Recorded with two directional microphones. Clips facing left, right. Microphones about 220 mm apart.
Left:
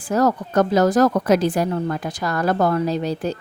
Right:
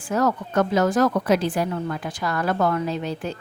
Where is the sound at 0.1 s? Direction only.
40° left (ahead or behind).